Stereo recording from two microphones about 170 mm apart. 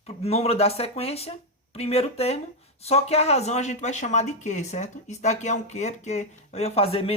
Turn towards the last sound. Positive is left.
turn(degrees=35)  # may be behind; listen again after turning